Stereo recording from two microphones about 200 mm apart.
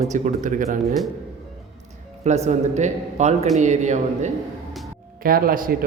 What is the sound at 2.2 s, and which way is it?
A man's voice, 35° right (ahead or behind).